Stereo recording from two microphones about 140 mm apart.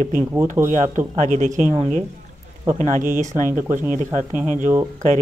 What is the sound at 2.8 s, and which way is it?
Speech, 65° right (ahead or behind).